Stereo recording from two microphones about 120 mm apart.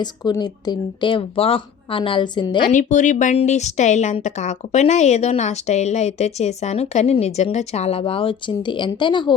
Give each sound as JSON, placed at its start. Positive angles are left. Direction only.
{"t": 0.0, "sound": "speech", "side_deg": 35}
{"t": 2.7, "sound": "speech", "side_deg": 90}
{"t": 3.3, "sound": "a woman's voice", "side_deg": 75}